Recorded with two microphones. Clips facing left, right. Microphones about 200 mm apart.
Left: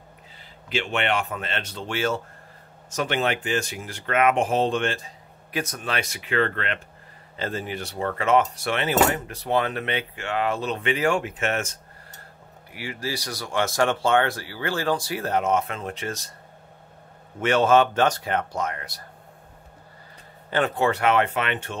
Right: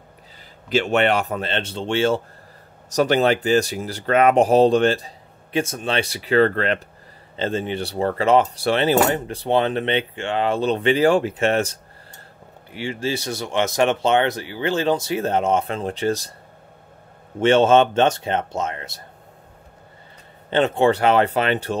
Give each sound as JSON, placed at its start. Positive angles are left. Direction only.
{"t": 0.7, "sound": "speech", "side_deg": -40}
{"t": 7.3, "sound": "speech", "side_deg": -25}
{"t": 17.4, "sound": "speech", "side_deg": -25}
{"t": 20.4, "sound": "speech", "side_deg": -25}